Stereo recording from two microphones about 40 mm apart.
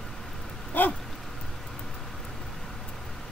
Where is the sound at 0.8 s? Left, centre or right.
Left.